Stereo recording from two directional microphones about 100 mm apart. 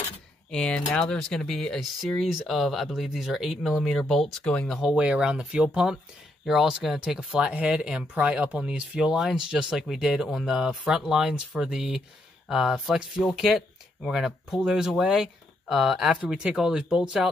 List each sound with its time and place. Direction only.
0.5 s speech: 10° left (ahead or behind)
4.8 s speech: 10° right (ahead or behind)